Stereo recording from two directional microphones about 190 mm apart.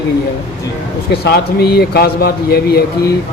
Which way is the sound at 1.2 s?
55° left (ahead or behind).